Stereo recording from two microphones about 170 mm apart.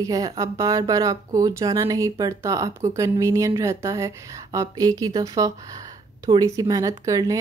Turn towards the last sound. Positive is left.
turn(degrees=-20)  # may be behind; listen again after turning